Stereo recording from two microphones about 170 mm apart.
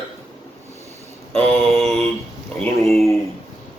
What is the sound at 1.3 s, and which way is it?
Mantra, 5° left (ahead or behind).